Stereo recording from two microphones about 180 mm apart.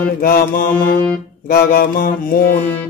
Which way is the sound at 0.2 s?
55° left (ahead or behind).